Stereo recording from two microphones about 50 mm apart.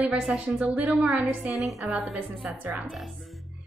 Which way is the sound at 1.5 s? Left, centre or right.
Centre.